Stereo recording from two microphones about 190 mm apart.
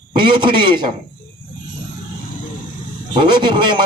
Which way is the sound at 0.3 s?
25° right (ahead or behind).